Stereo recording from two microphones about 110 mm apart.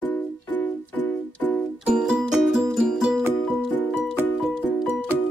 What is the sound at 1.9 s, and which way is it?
Music, 5° right (ahead or behind).